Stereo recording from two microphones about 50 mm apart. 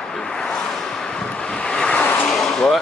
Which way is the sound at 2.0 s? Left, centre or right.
Left.